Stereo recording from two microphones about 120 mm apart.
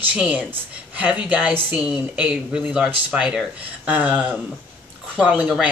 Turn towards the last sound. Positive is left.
turn(degrees=-10)  # may be behind; listen again after turning